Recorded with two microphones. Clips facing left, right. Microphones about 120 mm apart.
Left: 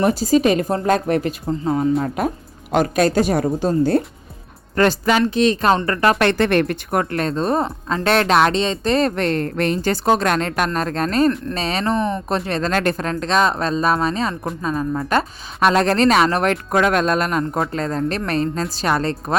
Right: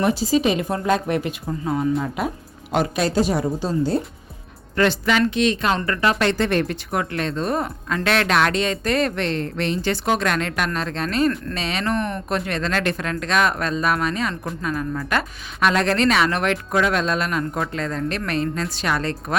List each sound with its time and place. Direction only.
0.0 s speech: 45° left (ahead or behind)
1.5 s speech: 30° left (ahead or behind)
2.0 s speech: 45° left (ahead or behind)
4.8 s speech: 40° left (ahead or behind)
6.0 s speech: 55° left (ahead or behind)
7.0 s speech: 40° left (ahead or behind)
11.9 s speech: 20° left (ahead or behind)
12.3 s speech: 35° left (ahead or behind)